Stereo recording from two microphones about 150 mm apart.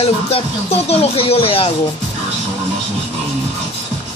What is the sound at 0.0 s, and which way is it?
Speech, 40° left (ahead or behind).